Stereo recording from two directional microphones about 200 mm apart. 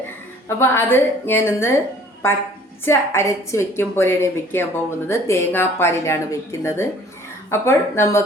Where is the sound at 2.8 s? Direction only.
15° left (ahead or behind).